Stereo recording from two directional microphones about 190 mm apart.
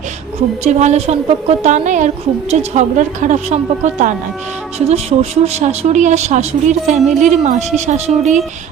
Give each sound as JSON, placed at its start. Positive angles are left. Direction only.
{"t": 0.3, "sound": "a woman's voice", "side_deg": -35}